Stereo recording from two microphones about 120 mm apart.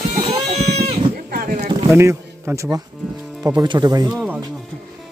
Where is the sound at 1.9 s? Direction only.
25° right (ahead or behind).